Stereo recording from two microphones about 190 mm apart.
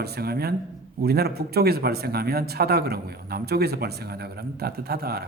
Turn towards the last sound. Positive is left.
turn(degrees=-55)  # may be behind; listen again after turning